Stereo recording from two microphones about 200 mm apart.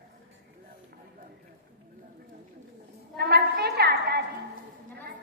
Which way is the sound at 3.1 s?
55° right (ahead or behind).